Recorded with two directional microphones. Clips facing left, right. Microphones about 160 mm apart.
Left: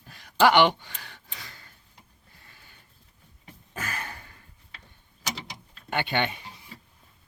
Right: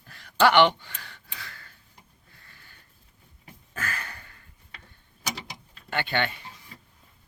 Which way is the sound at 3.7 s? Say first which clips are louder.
Even; 15° left (ahead or behind).